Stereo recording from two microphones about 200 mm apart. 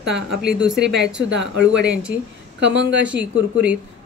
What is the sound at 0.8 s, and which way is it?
A woman's voice, 60° right (ahead or behind).